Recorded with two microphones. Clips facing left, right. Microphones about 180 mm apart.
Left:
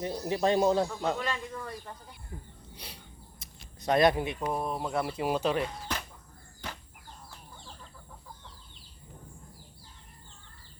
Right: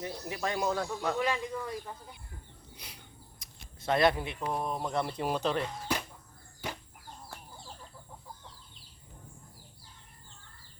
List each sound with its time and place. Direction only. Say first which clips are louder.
0.0 s speech: left 7 dB; 30° left (ahead or behind)
1.2 s speech: right 3 dB; 10° right (ahead or behind)
2.7 s a sound: left 4 dB; 30° left (ahead or behind)
4.5 s speech: right 1 dB; 5° left (ahead or behind)
6.6 s chicken: right 3 dB; 10° right (ahead or behind)